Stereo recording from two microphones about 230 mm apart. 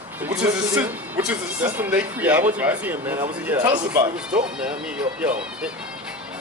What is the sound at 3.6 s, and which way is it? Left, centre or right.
Speech, centre.